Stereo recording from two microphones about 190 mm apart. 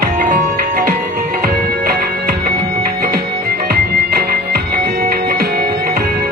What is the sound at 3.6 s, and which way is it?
Music, 55° right (ahead or behind).